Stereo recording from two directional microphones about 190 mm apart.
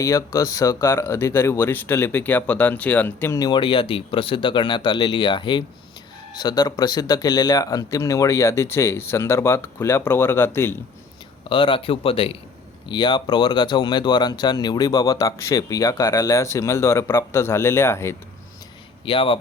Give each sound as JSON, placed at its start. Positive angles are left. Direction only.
{"t": 0.0, "sound": "speech", "side_deg": 20}
{"t": 11.4, "sound": "speech", "side_deg": 25}
{"t": 19.0, "sound": "speech", "side_deg": 30}